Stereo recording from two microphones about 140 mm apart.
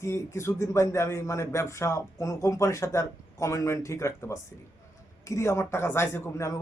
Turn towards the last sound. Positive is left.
turn(degrees=20)  # may be behind; listen again after turning